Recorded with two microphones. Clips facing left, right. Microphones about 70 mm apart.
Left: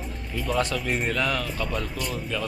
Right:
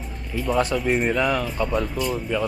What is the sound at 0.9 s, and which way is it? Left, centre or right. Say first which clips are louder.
Speech: right 5 dB; centre.